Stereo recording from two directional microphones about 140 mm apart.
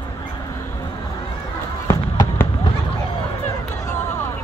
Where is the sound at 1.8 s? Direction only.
20° left (ahead or behind).